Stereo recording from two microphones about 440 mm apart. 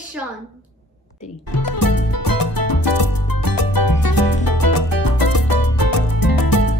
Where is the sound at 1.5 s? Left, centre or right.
Left.